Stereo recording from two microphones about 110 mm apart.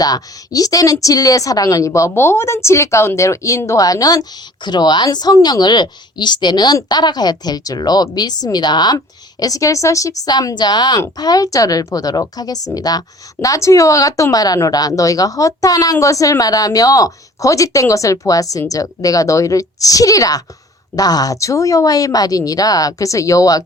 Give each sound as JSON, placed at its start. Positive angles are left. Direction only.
{"t": 0.0, "sound": "a woman's voice", "side_deg": 35}